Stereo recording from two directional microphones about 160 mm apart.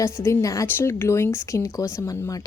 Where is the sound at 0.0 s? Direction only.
20° left (ahead or behind).